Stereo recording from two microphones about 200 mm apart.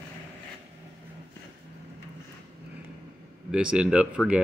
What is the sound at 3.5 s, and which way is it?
Speech, 5° right (ahead or behind).